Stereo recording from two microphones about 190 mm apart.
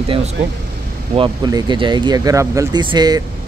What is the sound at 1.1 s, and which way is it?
Speech, 25° right (ahead or behind).